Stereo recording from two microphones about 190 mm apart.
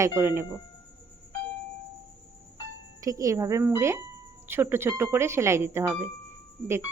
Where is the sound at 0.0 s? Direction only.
15° right (ahead or behind).